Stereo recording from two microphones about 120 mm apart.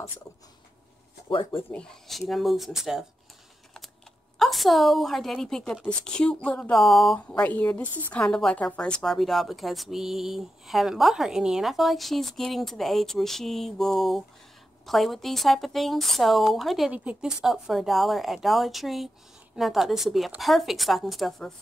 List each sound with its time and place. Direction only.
1.3 s speech: 45° left (ahead or behind)
1.7 s a woman's voice: 5° left (ahead or behind)
4.4 s a woman's voice: centre (ahead or behind)
7.2 s a woman's voice: 10° left (ahead or behind)